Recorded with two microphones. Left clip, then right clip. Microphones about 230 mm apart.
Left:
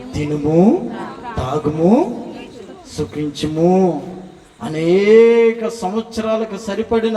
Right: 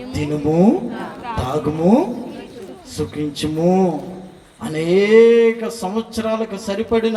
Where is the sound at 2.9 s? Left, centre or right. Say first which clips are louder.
Left 1 dB; centre.